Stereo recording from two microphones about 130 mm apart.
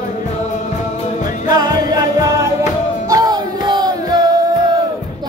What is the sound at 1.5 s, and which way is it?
Music, 30° right (ahead or behind).